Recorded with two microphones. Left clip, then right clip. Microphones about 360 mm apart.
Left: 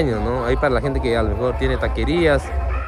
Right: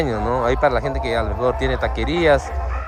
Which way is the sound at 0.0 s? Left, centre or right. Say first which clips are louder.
Right 1 dB; centre.